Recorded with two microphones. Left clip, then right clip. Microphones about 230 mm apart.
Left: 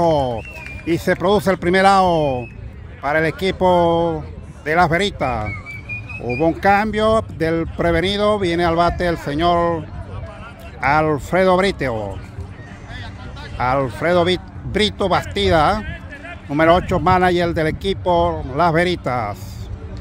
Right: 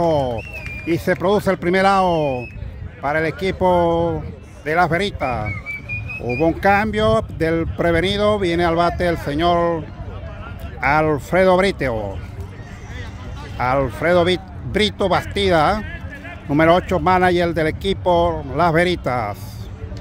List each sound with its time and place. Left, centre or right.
0.0 s a sound: centre
0.8 s speech: centre
10.8 s speech: centre
13.6 s speech: centre
15.8 s a sound: left
16.4 s speech: centre